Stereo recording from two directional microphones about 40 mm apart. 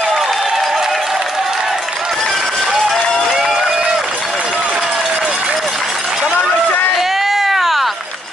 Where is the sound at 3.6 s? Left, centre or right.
Centre.